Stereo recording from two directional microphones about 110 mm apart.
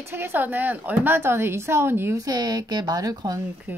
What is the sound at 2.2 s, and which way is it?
Speech, 35° right (ahead or behind).